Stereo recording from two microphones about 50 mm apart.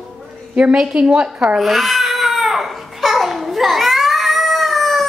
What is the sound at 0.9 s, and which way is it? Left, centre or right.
Speech, centre.